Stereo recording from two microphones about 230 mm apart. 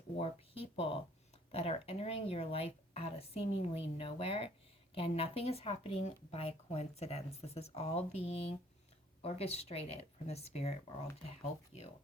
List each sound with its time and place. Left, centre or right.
0.2 s speech: left